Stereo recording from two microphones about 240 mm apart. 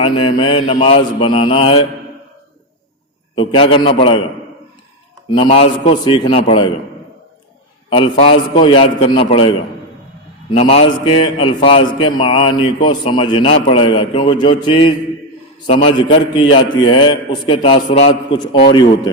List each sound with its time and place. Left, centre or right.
0.0 s a man's voice: left
3.3 s a man's voice: left
5.3 s a man's voice: left
7.9 s a man's voice: left
10.5 s a man's voice: left